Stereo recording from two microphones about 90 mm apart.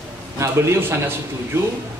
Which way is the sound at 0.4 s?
30° right (ahead or behind).